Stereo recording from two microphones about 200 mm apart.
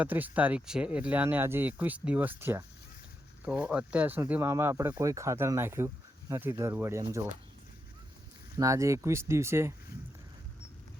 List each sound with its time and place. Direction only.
0.0 s speech: 10° right (ahead or behind)
8.5 s speech: 15° right (ahead or behind)